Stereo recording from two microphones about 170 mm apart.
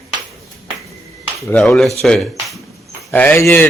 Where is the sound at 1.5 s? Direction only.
5° left (ahead or behind).